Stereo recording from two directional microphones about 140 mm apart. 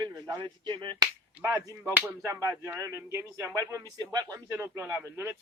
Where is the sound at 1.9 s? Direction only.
15° right (ahead or behind).